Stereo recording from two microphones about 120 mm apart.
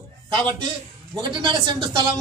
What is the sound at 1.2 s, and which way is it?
Speech, 40° right (ahead or behind).